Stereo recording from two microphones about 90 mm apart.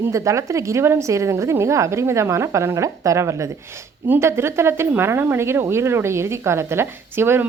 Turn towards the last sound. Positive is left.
turn(degrees=-25)  # may be behind; listen again after turning